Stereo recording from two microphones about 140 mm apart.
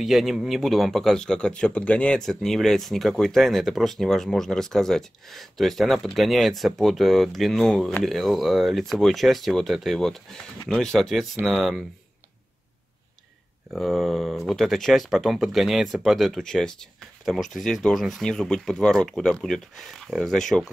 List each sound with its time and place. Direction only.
0.0 s a man's voice: centre (ahead or behind)
13.7 s a man's voice: centre (ahead or behind)